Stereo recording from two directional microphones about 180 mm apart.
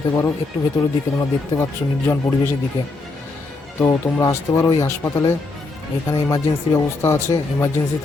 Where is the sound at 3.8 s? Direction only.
15° left (ahead or behind).